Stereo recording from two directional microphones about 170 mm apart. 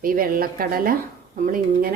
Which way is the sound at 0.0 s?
55° right (ahead or behind).